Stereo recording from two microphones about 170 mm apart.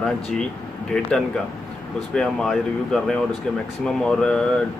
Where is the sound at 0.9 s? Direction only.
5° left (ahead or behind).